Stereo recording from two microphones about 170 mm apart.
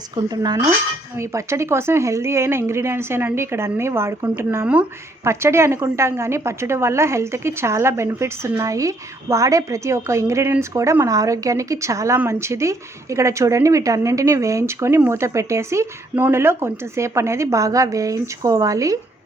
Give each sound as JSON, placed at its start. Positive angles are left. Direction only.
{"t": 1.1, "sound": "a woman's voice", "side_deg": -15}